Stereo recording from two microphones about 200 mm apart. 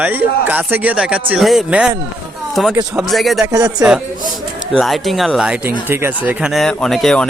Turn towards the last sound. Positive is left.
turn(degrees=0)  # may be behind; listen again after turning